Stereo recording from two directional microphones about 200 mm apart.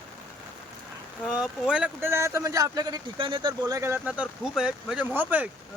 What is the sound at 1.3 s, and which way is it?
Speech, 5° right (ahead or behind).